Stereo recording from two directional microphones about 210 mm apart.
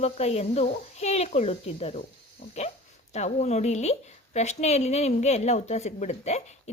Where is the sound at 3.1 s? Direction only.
30° left (ahead or behind).